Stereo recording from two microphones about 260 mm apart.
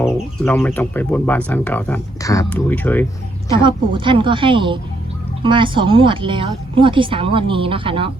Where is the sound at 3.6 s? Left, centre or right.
Centre.